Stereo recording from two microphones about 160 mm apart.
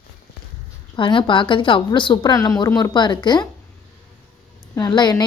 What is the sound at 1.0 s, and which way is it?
A woman's voice, 30° left (ahead or behind).